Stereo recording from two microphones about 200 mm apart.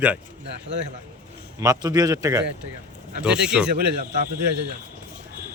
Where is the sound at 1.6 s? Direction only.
15° right (ahead or behind).